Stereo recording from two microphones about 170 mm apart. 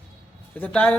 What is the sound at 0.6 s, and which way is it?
Speech, 10° left (ahead or behind).